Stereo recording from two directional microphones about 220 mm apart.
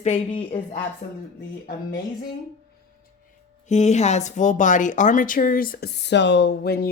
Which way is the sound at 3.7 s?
30° left (ahead or behind).